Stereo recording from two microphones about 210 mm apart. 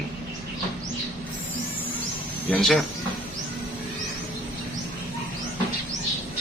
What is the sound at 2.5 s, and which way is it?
Speech, 5° left (ahead or behind).